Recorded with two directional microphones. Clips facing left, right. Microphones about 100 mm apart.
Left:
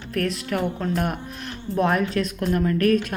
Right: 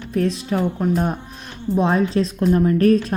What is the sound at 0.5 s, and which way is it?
Speech, 25° right (ahead or behind).